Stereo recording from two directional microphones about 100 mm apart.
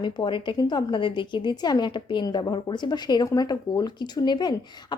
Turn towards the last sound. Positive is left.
turn(degrees=45)  # may be behind; listen again after turning